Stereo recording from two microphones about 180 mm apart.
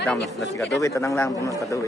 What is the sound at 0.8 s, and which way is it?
Speech, 15° left (ahead or behind).